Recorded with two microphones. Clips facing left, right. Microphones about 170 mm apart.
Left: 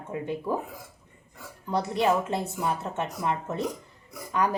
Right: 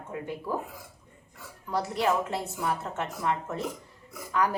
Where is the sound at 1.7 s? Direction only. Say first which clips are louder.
Left 3 dB; 20° left (ahead or behind).